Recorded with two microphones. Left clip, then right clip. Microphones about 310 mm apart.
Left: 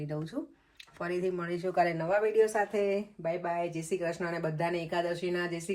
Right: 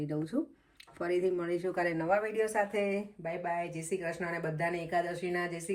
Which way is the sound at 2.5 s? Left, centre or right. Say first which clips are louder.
Left 2 dB; centre.